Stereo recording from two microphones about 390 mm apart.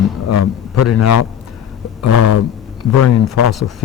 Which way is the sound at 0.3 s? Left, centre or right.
Left.